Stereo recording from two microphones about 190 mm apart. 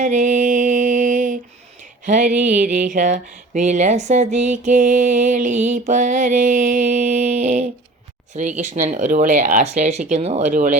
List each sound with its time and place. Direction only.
0.0 s music: 40° right (ahead or behind)
2.0 s speech: 40° right (ahead or behind)